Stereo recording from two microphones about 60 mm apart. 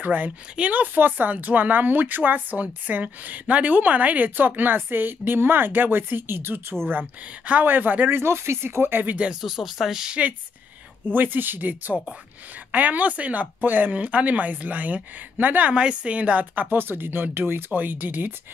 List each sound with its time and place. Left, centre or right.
0.0 s speech: right
6.9 s speech: right
8.1 s speech: right
9.3 s speech: centre
11.1 s speech: right